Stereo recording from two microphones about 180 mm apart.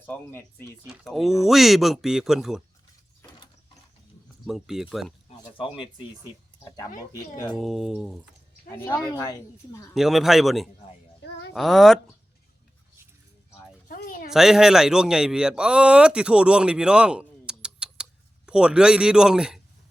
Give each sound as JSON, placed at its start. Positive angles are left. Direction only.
{"t": 0.0, "sound": "speech", "side_deg": 10}
{"t": 0.9, "sound": "speech", "side_deg": 0}
{"t": 4.4, "sound": "speech", "side_deg": 0}
{"t": 6.7, "sound": "speech", "side_deg": 20}
{"t": 7.5, "sound": "speech", "side_deg": 0}
{"t": 8.7, "sound": "speech", "side_deg": 15}
{"t": 9.9, "sound": "speech", "side_deg": 0}
{"t": 13.8, "sound": "a sound", "side_deg": 50}
{"t": 14.3, "sound": "speech", "side_deg": -5}